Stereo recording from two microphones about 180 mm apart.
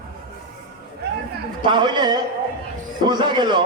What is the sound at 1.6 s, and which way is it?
A man's voice, 25° right (ahead or behind).